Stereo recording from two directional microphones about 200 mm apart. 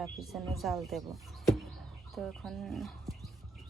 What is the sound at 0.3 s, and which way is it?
Speech, centre (ahead or behind).